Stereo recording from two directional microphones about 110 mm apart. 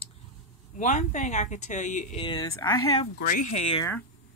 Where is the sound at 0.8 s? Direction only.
90° left.